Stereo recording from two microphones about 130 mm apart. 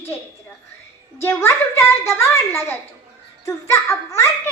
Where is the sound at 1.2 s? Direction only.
20° left (ahead or behind).